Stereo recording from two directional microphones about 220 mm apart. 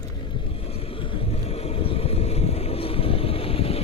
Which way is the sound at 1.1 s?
25° left (ahead or behind).